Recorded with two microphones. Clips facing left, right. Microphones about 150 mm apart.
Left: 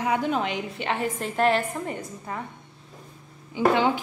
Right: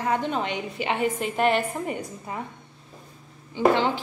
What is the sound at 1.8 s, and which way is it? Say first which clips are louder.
Speech: right 1 dB; 15° right (ahead or behind).